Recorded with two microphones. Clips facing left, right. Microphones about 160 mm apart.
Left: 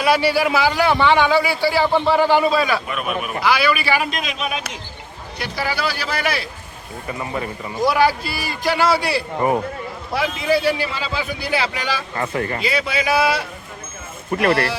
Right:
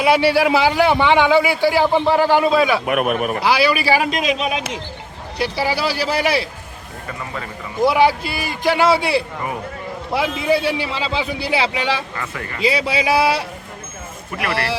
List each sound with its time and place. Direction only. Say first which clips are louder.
0.0 s a man's voice: right 2 dB; 25° right (ahead or behind); by 2.8 s centre (ahead or behind)
2.8 s a man's voice: right 6 dB; 60° right (ahead or behind)
3.4 s a man's voice: right 1 dB; 30° right (ahead or behind)
4.4 s a man's voice: right 4 dB; 20° right (ahead or behind)
7.1 s speech: left 4 dB; 20° left (ahead or behind)
7.8 s a man's voice: right 2 dB; 20° right (ahead or behind)
12.1 s speech: left 6 dB; 35° left (ahead or behind)
12.6 s a man's voice: right 7 dB; 30° right (ahead or behind)
14.3 s speech: left 7 dB; 30° left (ahead or behind)
14.5 s a man's voice: left 2 dB; 30° right (ahead or behind)